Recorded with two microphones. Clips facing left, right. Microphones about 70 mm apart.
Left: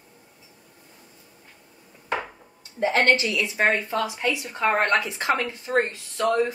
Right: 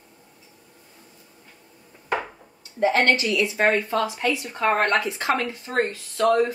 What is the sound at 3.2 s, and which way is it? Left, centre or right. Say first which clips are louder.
A woman's voice: right 2 dB; left.